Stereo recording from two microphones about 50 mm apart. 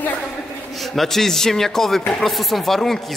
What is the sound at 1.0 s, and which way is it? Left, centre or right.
A woman's voice, centre.